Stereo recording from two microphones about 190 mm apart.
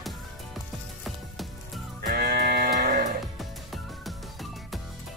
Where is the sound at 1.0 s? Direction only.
Centre (ahead or behind).